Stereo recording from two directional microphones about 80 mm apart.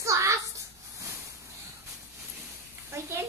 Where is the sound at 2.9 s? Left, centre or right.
Right.